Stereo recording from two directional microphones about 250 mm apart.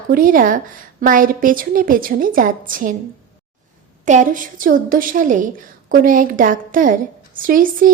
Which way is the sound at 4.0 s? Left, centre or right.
Right.